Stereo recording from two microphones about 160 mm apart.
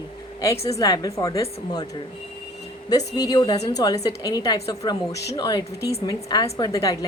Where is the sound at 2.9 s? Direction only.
25° left (ahead or behind).